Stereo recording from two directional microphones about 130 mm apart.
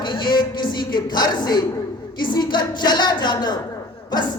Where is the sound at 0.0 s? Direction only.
35° left (ahead or behind).